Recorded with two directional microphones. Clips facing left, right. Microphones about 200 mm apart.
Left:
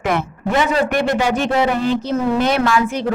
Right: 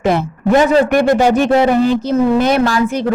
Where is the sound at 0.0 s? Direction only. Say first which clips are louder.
Right 5 dB; 30° right (ahead or behind).